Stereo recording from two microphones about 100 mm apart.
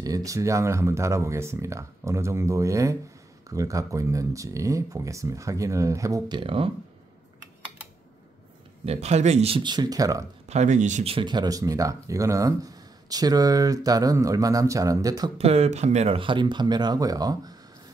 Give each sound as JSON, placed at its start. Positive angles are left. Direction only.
{"t": 0.0, "sound": "speech", "side_deg": -35}
{"t": 6.2, "sound": "speech", "side_deg": -55}
{"t": 8.8, "sound": "speech", "side_deg": -90}
{"t": 9.6, "sound": "speech", "side_deg": -45}
{"t": 10.5, "sound": "speech", "side_deg": -90}
{"t": 11.2, "sound": "speech", "side_deg": -40}
{"t": 15.3, "sound": "speech", "side_deg": -90}